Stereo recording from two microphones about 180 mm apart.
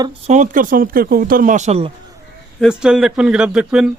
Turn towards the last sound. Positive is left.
turn(degrees=-5)  # may be behind; listen again after turning